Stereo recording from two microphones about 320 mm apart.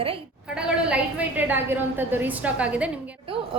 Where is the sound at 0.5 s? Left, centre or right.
Centre.